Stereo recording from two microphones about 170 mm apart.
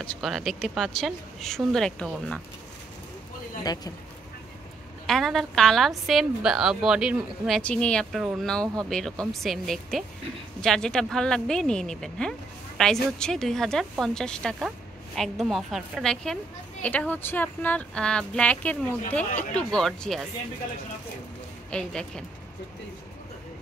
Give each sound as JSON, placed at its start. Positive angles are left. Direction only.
{"t": 0.0, "sound": "a woman's voice", "side_deg": 5}
{"t": 3.6, "sound": "speech", "side_deg": 25}
{"t": 5.0, "sound": "a woman's voice", "side_deg": 0}
{"t": 21.6, "sound": "a woman's voice", "side_deg": 5}